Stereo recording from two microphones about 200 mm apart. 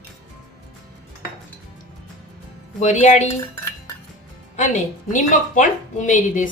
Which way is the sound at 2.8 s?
35° left (ahead or behind).